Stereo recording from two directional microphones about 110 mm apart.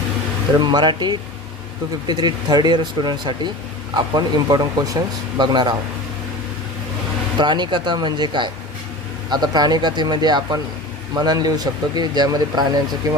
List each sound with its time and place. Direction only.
0.6 s speech: 45° right (ahead or behind)
7.3 s speech: 45° right (ahead or behind)